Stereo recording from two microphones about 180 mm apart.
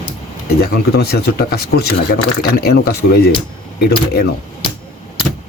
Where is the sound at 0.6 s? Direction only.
60° left (ahead or behind).